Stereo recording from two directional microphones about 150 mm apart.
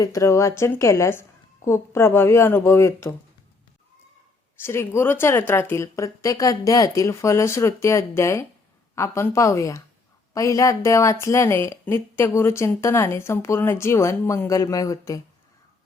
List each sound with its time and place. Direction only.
0.0 s speech: 20° left (ahead or behind)
4.6 s speech: 15° left (ahead or behind)